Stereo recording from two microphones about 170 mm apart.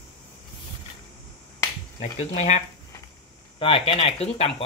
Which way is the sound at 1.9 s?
40° left (ahead or behind).